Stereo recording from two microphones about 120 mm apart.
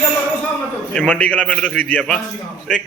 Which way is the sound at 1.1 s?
15° left (ahead or behind).